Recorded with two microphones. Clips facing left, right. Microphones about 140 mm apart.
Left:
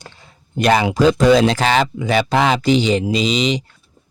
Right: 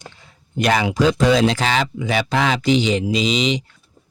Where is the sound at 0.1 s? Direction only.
35° left (ahead or behind).